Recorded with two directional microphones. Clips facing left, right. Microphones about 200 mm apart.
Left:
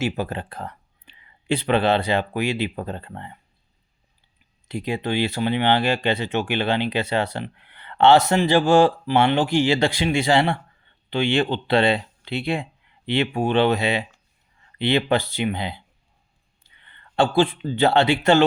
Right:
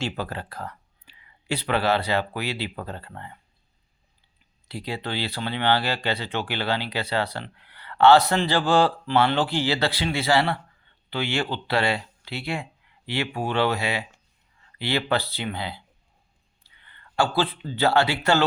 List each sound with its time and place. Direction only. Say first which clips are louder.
0.0 s speech: left 5 dB; 20° left (ahead or behind)
4.7 s speech: left 6 dB; 15° left (ahead or behind)
16.8 s speech: left 4 dB; 25° left (ahead or behind)